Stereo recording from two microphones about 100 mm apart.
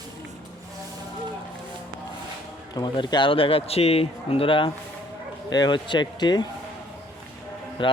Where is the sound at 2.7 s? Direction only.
45° left (ahead or behind).